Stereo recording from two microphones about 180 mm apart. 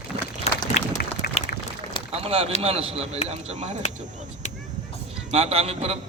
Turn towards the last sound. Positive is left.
turn(degrees=-35)  # may be behind; listen again after turning